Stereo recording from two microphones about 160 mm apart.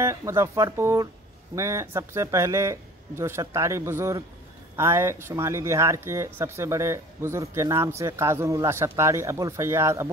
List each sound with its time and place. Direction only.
0.0 s speech: 20° right (ahead or behind)